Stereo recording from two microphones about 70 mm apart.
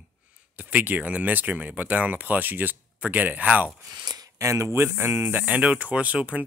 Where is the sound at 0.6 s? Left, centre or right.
Right.